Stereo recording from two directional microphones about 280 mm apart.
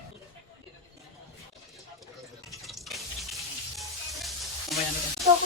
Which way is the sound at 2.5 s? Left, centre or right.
Centre.